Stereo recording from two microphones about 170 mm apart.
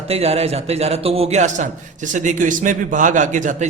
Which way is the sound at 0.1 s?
35° right (ahead or behind).